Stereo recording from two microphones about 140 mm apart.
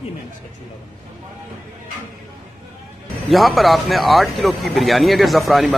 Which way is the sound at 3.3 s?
Centre (ahead or behind).